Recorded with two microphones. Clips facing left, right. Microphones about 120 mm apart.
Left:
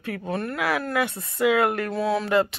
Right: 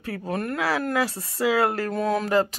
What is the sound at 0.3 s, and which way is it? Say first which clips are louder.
Speech: right 1 dB; 45° right (ahead or behind).